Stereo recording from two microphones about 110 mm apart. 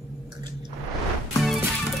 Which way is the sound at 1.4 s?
Centre (ahead or behind).